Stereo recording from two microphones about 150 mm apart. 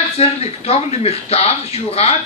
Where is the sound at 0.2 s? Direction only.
45° left (ahead or behind).